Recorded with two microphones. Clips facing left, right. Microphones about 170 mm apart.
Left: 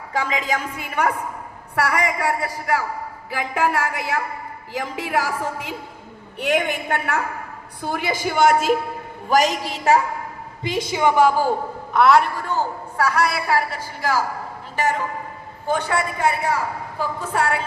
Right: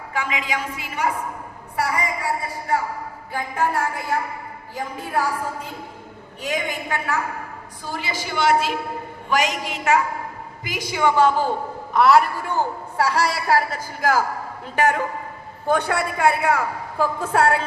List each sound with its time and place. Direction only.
0.1 s a woman's voice: 35° left (ahead or behind); by 1.1 s 55° left (ahead or behind)
1.7 s a man's voice: 75° left (ahead or behind); by 5.7 s 90° left
6.4 s a woman's voice: 65° left (ahead or behind); by 8.7 s 50° left (ahead or behind)
9.3 s a woman's voice: 35° left (ahead or behind)
10.6 s a woman's voice: 25° left (ahead or behind)
11.9 s a man's voice: centre (ahead or behind)
13.0 s a woman's voice: 30° right (ahead or behind); by 14.2 s 45° right (ahead or behind)
14.8 s a man's voice: 55° right (ahead or behind)